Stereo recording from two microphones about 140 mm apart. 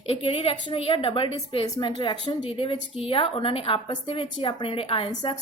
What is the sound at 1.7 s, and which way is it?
Speech, 30° left (ahead or behind).